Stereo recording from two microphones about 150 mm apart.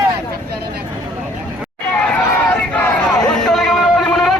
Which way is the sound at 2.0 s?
10° left (ahead or behind).